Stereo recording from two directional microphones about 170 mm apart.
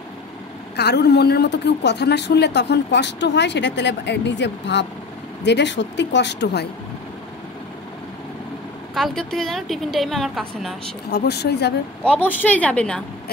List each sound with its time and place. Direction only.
0.7 s a man's voice: 75° left (ahead or behind)
8.9 s a woman's voice: centre (ahead or behind)
11.1 s speech: 75° left (ahead or behind)
12.0 s a woman's voice: 10° left (ahead or behind)